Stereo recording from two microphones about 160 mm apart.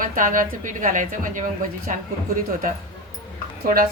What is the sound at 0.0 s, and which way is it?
Speech, 55° right (ahead or behind).